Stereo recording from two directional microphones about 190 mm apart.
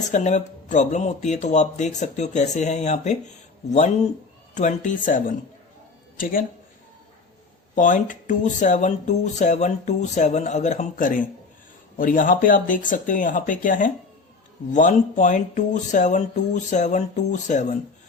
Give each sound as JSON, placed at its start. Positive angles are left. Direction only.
{"t": 0.1, "sound": "speech", "side_deg": 40}
{"t": 7.8, "sound": "speech", "side_deg": 40}